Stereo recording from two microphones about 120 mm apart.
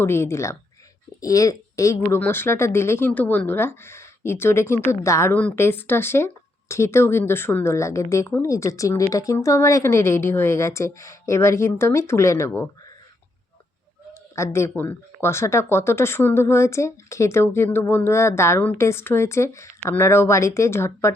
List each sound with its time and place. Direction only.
0.0 s speech: 20° left (ahead or behind)
5.3 s speech: 10° left (ahead or behind)
14.1 s speech: 20° left (ahead or behind)